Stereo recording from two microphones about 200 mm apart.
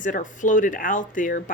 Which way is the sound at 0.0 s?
40° left (ahead or behind).